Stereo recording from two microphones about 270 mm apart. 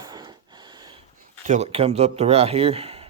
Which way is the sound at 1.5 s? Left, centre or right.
Right.